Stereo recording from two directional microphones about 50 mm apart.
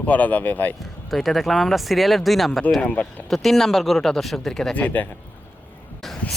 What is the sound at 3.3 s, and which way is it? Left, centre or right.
Speech, centre.